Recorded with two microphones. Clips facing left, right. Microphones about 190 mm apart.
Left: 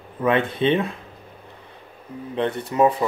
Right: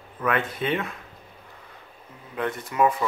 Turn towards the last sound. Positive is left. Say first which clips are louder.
# left 4 dB
turn(degrees=35)  # may be behind; listen again after turning